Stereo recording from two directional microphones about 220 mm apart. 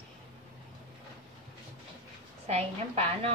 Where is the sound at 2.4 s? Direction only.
30° right (ahead or behind).